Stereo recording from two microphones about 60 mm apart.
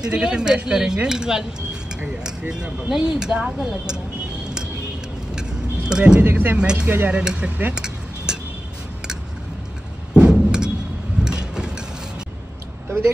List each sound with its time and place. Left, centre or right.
0.0 s speech: centre
5.3 s vehicle: centre
6.2 s speech: right
6.6 s speech: centre
10.1 s vehicle: centre
11.2 s a sound: centre